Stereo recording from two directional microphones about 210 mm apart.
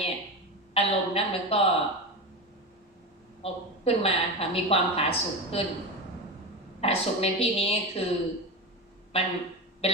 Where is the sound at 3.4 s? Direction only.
30° left (ahead or behind).